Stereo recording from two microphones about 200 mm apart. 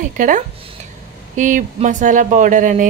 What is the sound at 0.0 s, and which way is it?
A woman's voice, 40° right (ahead or behind).